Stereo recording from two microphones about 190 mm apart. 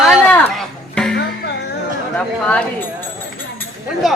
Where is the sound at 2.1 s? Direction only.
5° left (ahead or behind).